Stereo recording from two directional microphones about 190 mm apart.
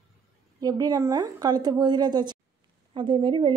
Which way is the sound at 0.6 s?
20° right (ahead or behind).